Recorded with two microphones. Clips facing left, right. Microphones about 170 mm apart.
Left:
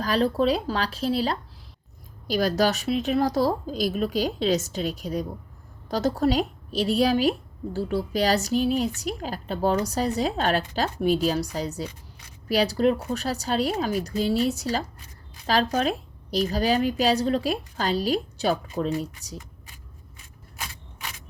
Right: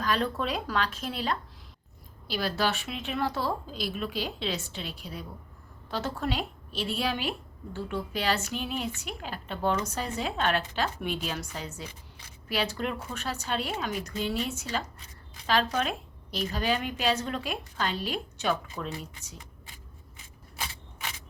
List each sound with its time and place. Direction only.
0.0 s a woman's voice: 35° left (ahead or behind)